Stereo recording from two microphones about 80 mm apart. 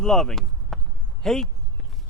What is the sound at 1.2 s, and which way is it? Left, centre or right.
Speech, centre.